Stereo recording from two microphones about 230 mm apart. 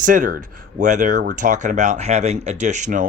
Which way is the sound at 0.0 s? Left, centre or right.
Right.